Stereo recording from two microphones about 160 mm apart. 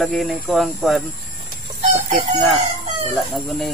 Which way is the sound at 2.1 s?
50° right (ahead or behind).